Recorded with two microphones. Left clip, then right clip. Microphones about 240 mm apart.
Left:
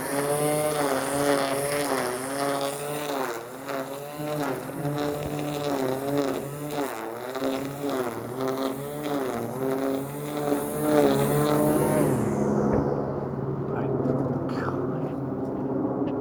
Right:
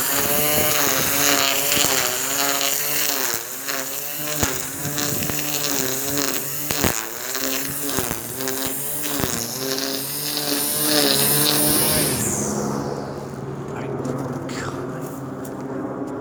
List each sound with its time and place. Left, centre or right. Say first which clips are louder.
0.3 s a sound: right 3 dB; right
1.2 s vehicle: right 5 dB; right
2.9 s insect: right 5 dB; right
5.6 s insect: left 1 dB; right
7.4 s vehicle: even; right
8.4 s a sound: right 1 dB; right